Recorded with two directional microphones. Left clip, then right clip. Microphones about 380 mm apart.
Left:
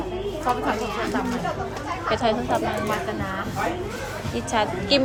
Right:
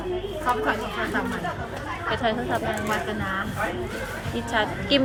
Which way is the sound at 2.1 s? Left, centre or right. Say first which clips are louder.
Left 3 dB; centre.